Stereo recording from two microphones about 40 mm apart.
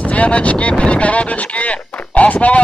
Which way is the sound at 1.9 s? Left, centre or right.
Left.